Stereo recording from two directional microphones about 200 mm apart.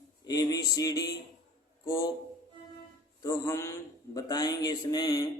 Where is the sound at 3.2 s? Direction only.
15° left (ahead or behind).